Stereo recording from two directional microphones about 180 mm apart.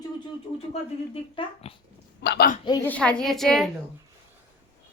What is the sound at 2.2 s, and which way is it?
Speech, 75° left (ahead or behind).